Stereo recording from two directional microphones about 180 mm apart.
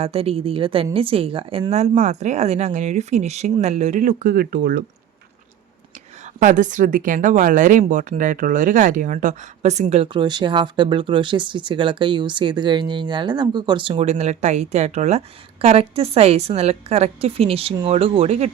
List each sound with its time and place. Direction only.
0.0 s speech: 30° right (ahead or behind); by 4.8 s 55° right (ahead or behind)
6.2 s speech: 45° right (ahead or behind)